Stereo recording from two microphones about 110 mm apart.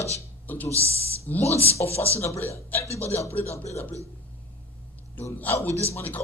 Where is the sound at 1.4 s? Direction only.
70° left (ahead or behind).